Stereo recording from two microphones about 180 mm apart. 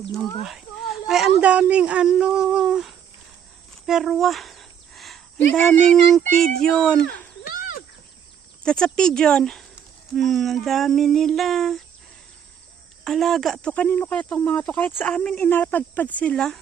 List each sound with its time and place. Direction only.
1.0 s speech: centre (ahead or behind)
7.4 s cricket: 55° left (ahead or behind)
8.6 s speech: 5° left (ahead or behind)
13.1 s speech: centre (ahead or behind)